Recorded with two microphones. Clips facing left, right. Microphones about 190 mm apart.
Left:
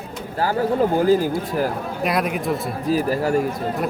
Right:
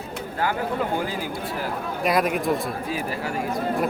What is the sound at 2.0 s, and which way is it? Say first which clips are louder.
Speech: even; centre (ahead or behind).